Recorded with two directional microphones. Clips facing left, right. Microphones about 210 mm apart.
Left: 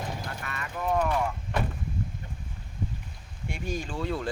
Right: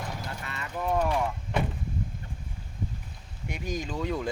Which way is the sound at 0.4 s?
25° right (ahead or behind).